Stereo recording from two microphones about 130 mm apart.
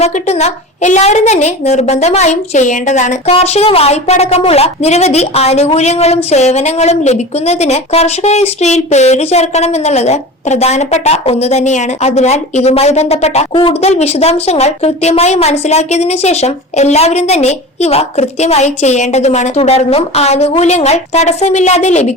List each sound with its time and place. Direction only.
0.0 s a woman's voice: 60° left (ahead or behind); by 13.7 s 40° left (ahead or behind)
13.8 s a woman's voice: 55° left (ahead or behind)